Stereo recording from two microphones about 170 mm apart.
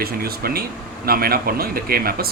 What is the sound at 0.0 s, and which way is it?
Speech, 65° right (ahead or behind).